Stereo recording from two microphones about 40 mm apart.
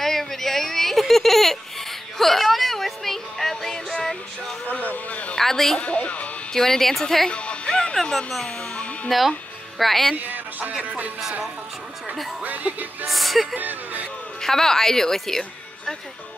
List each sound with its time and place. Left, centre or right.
0.0 s a sound: centre
4.9 s a sound: left
5.4 s speech: centre
5.8 s speech: left
6.5 s a woman's voice: centre
7.2 s music: left
9.1 s music: centre
10.1 s speech: right
10.8 s music: right
12.4 s speech: right
13.0 s music: centre
13.6 s speech: right
14.4 s a woman's voice: centre